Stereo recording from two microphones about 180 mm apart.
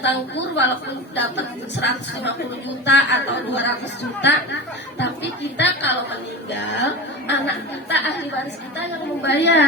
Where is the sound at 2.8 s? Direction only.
75° left (ahead or behind).